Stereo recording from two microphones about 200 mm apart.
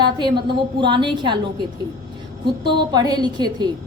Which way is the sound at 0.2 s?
25° right (ahead or behind).